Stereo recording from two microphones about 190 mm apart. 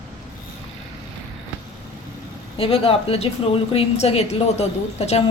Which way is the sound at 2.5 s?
30° left (ahead or behind).